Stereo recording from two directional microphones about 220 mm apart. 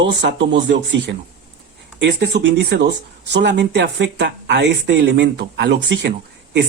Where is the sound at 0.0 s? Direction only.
50° right (ahead or behind).